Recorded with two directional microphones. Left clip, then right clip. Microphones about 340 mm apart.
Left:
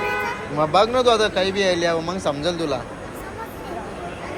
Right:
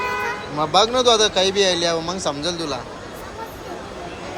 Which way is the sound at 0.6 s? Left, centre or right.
Centre.